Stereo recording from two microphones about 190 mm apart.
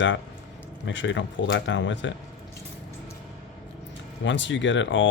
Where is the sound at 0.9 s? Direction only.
75° left (ahead or behind).